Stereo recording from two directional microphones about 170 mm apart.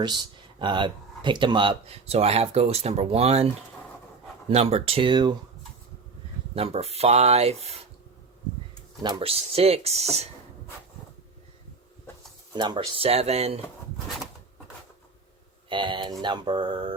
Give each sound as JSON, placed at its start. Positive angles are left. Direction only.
{"t": 0.0, "sound": "speech", "side_deg": -25}
{"t": 6.5, "sound": "speech", "side_deg": -35}
{"t": 9.0, "sound": "speech", "side_deg": -25}
{"t": 12.5, "sound": "speech", "side_deg": -25}
{"t": 15.7, "sound": "a sound", "side_deg": -30}
{"t": 16.2, "sound": "speech", "side_deg": -25}